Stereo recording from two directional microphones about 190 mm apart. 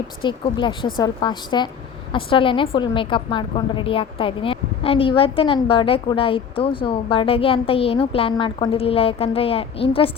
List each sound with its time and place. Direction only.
0.2 s a woman's voice: 25° left (ahead or behind)